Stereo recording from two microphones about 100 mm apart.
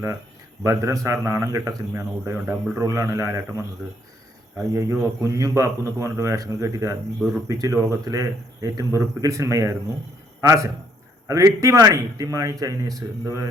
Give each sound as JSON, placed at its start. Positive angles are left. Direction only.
{"t": 0.6, "sound": "speech", "side_deg": -30}
{"t": 4.7, "sound": "a man's voice", "side_deg": -30}